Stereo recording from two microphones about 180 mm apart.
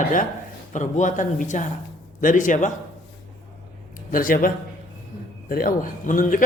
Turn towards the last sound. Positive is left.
turn(degrees=45)  # may be behind; listen again after turning